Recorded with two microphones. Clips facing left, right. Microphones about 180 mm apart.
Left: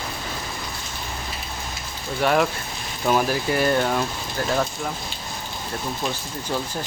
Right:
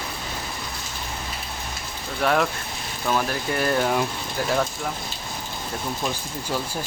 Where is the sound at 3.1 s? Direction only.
15° left (ahead or behind).